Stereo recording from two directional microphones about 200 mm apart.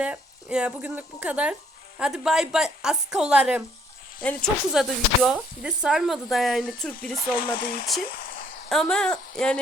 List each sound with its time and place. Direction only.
0.0 s speech: 5° right (ahead or behind)
7.2 s speech: 45° left (ahead or behind)
8.7 s speech: 5° left (ahead or behind)